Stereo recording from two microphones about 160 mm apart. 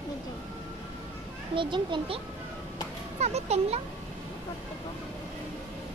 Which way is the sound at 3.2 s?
40° right (ahead or behind).